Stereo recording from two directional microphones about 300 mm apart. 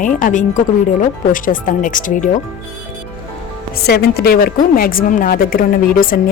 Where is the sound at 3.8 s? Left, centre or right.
Left.